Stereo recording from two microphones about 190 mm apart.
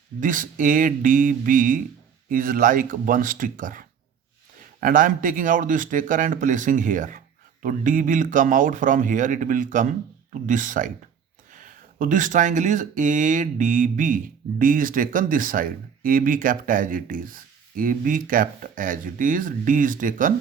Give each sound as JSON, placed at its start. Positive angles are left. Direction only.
{"t": 0.2, "sound": "speech", "side_deg": -45}